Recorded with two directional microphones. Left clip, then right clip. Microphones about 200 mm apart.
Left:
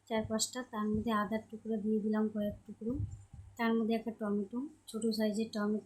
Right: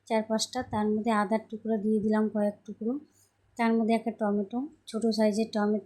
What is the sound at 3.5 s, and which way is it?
Speech, 25° right (ahead or behind).